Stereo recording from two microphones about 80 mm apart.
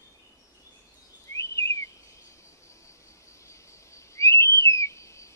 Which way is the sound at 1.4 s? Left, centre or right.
Left.